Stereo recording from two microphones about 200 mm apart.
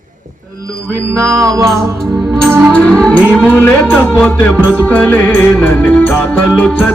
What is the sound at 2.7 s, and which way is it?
Music, 5° left (ahead or behind).